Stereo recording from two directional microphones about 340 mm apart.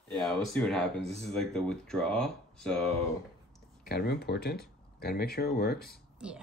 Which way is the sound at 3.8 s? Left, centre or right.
Left.